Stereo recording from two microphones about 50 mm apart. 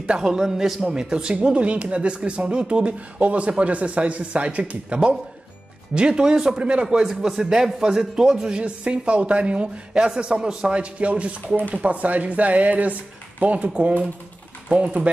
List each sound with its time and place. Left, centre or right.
0.0 s a man's voice: centre